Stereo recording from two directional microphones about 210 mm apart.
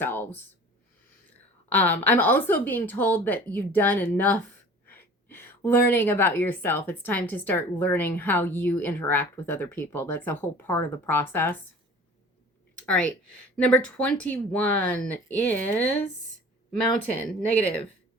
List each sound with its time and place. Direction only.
0.0 s a woman's voice: 10° left (ahead or behind)
1.7 s a woman's voice: 10° left (ahead or behind)
12.8 s a woman's voice: 5° left (ahead or behind)